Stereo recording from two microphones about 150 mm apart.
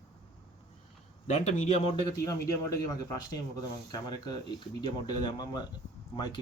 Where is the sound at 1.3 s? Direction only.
50° left (ahead or behind).